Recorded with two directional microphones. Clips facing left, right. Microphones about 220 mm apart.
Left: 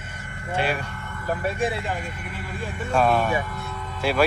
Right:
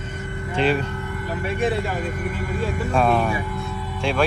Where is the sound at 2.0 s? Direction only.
45° right (ahead or behind).